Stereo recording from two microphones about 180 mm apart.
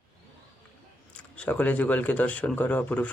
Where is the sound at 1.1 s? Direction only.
5° left (ahead or behind).